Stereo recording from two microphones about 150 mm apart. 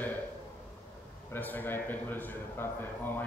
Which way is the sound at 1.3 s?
10° left (ahead or behind).